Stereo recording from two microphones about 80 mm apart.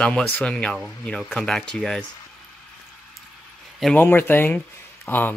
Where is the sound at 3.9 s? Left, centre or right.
Left.